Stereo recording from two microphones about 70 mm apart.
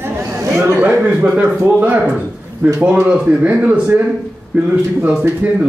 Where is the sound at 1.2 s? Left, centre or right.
Centre.